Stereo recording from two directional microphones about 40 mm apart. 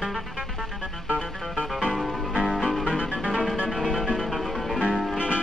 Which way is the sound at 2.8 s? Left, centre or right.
Centre.